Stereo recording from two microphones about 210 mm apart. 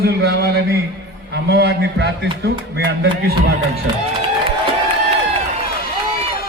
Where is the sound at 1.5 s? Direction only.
50° right (ahead or behind).